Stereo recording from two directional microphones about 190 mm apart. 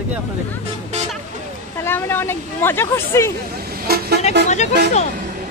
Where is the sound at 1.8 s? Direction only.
10° left (ahead or behind).